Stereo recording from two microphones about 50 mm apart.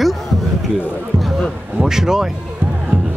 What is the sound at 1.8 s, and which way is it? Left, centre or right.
Speech, centre.